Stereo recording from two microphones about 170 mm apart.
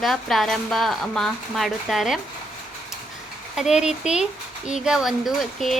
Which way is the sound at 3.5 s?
5° right (ahead or behind).